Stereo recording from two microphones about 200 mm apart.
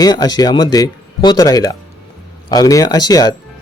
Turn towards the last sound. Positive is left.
turn(degrees=20)  # may be behind; listen again after turning